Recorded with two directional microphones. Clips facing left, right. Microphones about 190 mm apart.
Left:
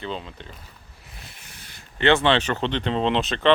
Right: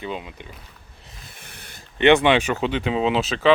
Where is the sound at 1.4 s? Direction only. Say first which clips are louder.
Right 3 dB; 60° right (ahead or behind).